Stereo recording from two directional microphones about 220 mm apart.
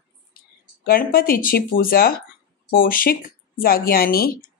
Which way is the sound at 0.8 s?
40° left (ahead or behind).